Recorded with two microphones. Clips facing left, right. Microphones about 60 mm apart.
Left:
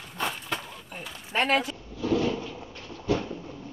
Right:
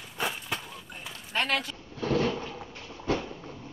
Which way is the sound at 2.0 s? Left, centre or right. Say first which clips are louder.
Left 1 dB; right.